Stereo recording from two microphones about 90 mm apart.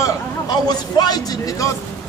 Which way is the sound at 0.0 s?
45° left (ahead or behind).